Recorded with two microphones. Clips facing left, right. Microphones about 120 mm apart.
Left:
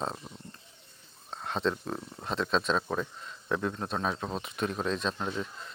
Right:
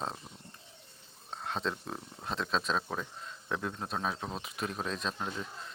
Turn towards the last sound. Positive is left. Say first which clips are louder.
# left 4 dB
turn(degrees=0)  # may be behind; listen again after turning